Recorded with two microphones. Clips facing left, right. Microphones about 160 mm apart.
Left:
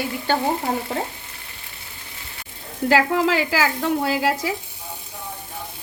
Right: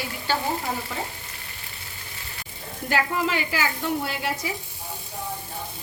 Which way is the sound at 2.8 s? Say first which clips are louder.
Left 7 dB; 90° left.